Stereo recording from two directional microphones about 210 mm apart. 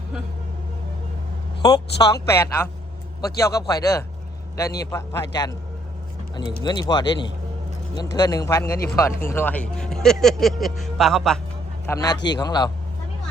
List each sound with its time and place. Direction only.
1.6 s speech: 20° left (ahead or behind)
6.6 s speech: 20° left (ahead or behind); by 11.3 s centre (ahead or behind)
11.9 s speech: 15° left (ahead or behind)